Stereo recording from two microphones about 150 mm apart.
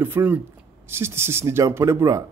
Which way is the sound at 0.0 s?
10° right (ahead or behind).